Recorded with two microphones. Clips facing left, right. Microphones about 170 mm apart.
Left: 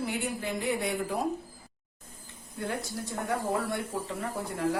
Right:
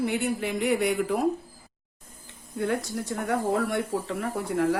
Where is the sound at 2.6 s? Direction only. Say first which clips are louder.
Right 6 dB; 80° right.